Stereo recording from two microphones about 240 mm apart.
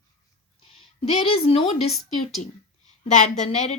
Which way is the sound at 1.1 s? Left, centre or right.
Left.